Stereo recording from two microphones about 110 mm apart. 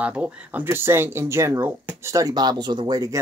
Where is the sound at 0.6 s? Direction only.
20° right (ahead or behind).